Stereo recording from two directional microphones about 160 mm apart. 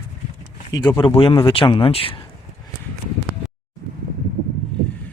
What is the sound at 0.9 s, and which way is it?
Speech, 30° left (ahead or behind).